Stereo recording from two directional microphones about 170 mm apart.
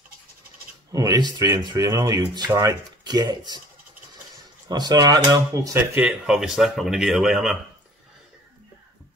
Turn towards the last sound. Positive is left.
turn(degrees=0)  # may be behind; listen again after turning